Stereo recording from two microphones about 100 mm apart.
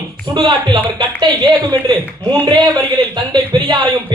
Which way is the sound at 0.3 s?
50° right (ahead or behind).